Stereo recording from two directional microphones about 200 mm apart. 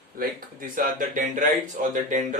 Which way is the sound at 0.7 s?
40° right (ahead or behind).